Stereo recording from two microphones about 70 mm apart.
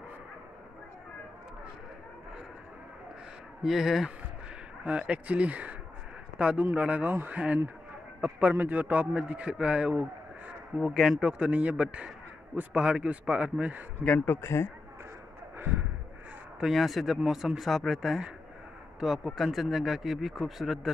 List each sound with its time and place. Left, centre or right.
3.6 s speech: centre
4.8 s a man's voice: centre
10.8 s a man's voice: centre; by 13.8 s right
14.0 s speech: left
14.3 s a man's voice: left
15.5 s a sound: right
16.5 s speech: centre